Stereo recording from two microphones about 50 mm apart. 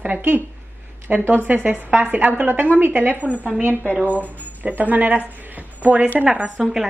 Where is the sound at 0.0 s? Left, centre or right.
Right.